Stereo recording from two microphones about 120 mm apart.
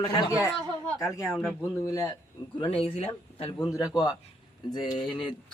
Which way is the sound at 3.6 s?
30° left (ahead or behind).